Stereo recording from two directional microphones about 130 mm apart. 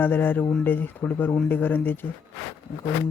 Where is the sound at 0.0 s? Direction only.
15° left (ahead or behind).